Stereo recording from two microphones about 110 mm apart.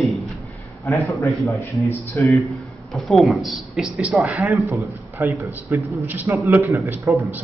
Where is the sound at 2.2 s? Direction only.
15° left (ahead or behind).